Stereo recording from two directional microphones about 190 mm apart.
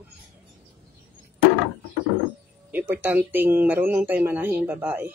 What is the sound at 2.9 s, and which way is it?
Speech, 10° right (ahead or behind).